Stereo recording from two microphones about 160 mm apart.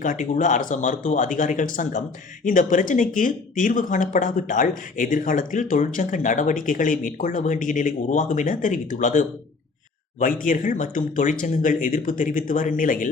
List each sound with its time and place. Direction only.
0.0 s speech: 55° left (ahead or behind)